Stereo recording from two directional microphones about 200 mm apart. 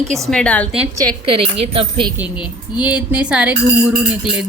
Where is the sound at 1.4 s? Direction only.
25° right (ahead or behind).